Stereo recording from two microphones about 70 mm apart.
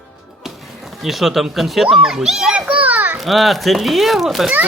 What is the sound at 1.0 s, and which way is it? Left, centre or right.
A child's voice, centre.